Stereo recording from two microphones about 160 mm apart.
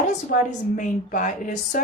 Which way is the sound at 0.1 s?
55° left (ahead or behind).